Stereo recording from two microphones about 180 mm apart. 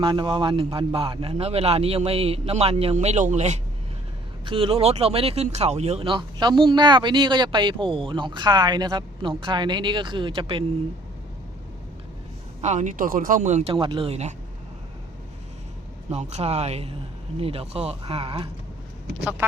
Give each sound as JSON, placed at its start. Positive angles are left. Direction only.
{"t": 0.0, "sound": "a man's voice", "side_deg": -25}
{"t": 12.6, "sound": "speech", "side_deg": -40}
{"t": 13.7, "sound": "a man's voice", "side_deg": -30}
{"t": 16.0, "sound": "a man's voice", "side_deg": -40}
{"t": 19.2, "sound": "speech", "side_deg": -5}